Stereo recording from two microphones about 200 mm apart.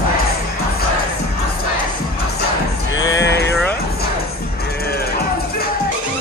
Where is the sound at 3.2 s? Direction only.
60° left (ahead or behind).